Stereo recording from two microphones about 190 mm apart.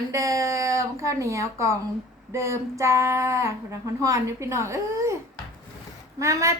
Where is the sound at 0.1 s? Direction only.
15° right (ahead or behind).